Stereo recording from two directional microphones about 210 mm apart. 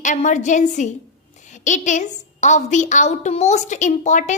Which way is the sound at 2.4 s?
35° left (ahead or behind).